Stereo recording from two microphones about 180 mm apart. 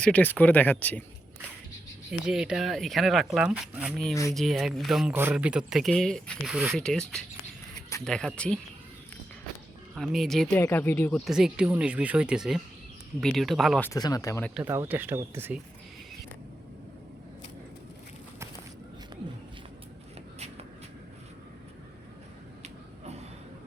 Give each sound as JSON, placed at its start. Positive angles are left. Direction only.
{"t": 0.0, "sound": "speech", "side_deg": 10}
{"t": 2.0, "sound": "speech", "side_deg": -5}
{"t": 4.1, "sound": "speech", "side_deg": 20}
{"t": 4.4, "sound": "speech", "side_deg": 0}
{"t": 9.9, "sound": "speech", "side_deg": 0}
{"t": 10.6, "sound": "speech", "side_deg": 10}
{"t": 11.3, "sound": "speech", "side_deg": -5}
{"t": 13.8, "sound": "speech", "side_deg": 20}
{"t": 14.5, "sound": "speech", "side_deg": -15}